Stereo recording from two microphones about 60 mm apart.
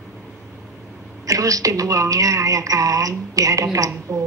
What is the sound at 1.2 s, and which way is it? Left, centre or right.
A woman's voice, right.